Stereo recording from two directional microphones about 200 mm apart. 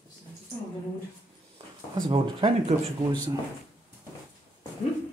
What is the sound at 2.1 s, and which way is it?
Speech, 25° right (ahead or behind).